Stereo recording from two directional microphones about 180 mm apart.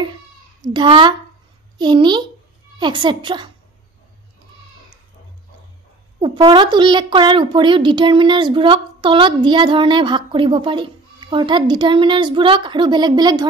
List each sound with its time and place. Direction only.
0.6 s a child's voice: 25° right (ahead or behind)
6.2 s a child's voice: 25° right (ahead or behind)